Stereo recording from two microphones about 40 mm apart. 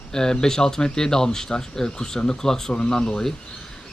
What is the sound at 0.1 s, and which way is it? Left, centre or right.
Speech, centre.